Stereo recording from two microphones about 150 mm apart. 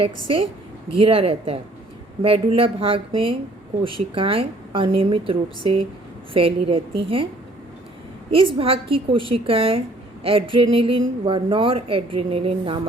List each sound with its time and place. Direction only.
0.0 s a woman's voice: 40° right (ahead or behind)
8.3 s a woman's voice: 35° right (ahead or behind)